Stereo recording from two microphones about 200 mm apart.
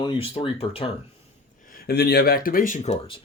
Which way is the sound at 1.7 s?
55° left (ahead or behind).